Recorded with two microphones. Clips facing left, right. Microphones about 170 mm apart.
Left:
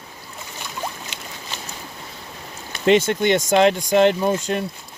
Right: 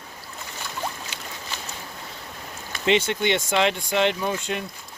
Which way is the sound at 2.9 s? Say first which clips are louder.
Left 5 dB; 45° left (ahead or behind).